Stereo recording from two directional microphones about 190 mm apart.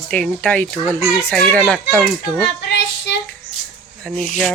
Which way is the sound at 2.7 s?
65° left (ahead or behind).